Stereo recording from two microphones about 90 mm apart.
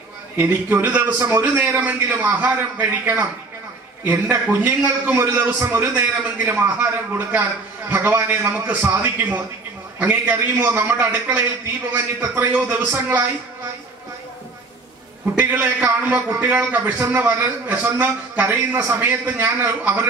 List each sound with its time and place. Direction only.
0.4 s a man's voice: 20° right (ahead or behind)
15.3 s a man's voice: 20° right (ahead or behind)